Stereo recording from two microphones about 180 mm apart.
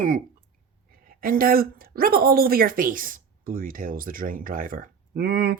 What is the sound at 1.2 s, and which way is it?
Speech, 50° right (ahead or behind).